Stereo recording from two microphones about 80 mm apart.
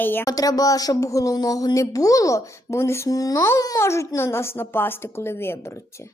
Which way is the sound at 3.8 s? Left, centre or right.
Left.